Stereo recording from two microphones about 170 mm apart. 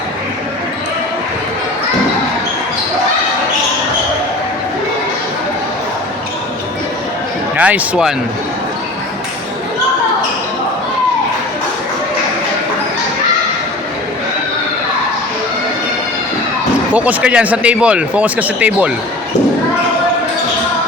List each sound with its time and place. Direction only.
7.5 s speech: 10° right (ahead or behind)
16.9 s speech: 10° right (ahead or behind)